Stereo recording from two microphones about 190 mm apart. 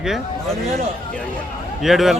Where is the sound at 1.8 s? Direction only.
Centre (ahead or behind).